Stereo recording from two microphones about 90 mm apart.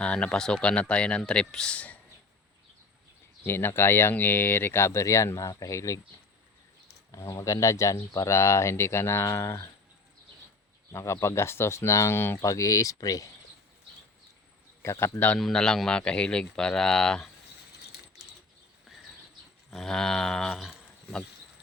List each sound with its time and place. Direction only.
0.0 s speech: 10° left (ahead or behind)
3.4 s speech: 25° left (ahead or behind)
7.1 s speech: 35° left (ahead or behind)
10.9 s speech: 35° left (ahead or behind)
12.4 s speech: 40° left (ahead or behind)
14.8 s speech: 25° left (ahead or behind)
15.4 s speech: 5° left (ahead or behind)
19.7 s speech: 5° left (ahead or behind)